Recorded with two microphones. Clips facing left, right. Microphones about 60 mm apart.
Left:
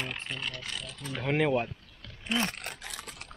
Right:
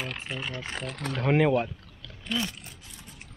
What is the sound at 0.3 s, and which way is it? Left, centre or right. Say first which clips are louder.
Speech: right 3 dB; centre.